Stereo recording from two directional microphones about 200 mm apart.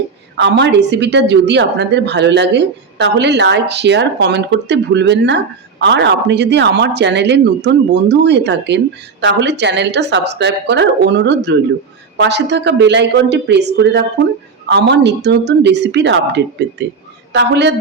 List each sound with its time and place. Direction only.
0.3 s a woman's voice: 60° right (ahead or behind)